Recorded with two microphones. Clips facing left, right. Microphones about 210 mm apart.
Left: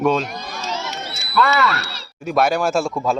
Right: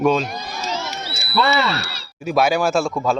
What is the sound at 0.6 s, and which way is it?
Crowd, 10° right (ahead or behind).